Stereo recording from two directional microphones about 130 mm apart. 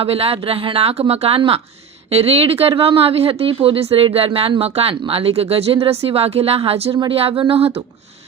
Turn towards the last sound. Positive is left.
turn(degrees=-50)  # may be behind; listen again after turning